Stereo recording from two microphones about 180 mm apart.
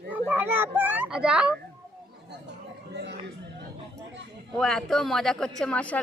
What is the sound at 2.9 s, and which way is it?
Speech, 70° right (ahead or behind).